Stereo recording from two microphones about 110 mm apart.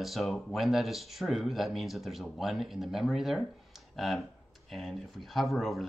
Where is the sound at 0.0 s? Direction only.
Centre (ahead or behind).